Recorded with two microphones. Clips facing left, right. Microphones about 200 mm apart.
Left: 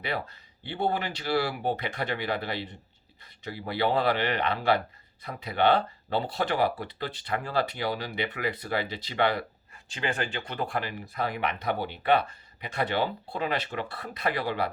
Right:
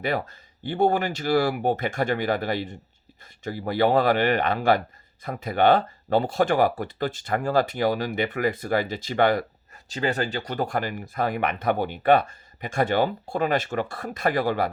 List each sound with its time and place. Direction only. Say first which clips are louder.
0.0 s speech: right 6 dB; 45° right (ahead or behind)